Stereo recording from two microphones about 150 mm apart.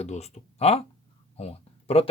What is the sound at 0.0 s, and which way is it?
Speech, 45° left (ahead or behind).